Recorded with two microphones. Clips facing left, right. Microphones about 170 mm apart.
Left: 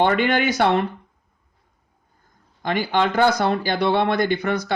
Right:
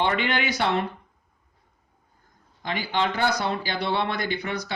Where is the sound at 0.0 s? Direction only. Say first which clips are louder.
Left 6 dB; 50° left (ahead or behind).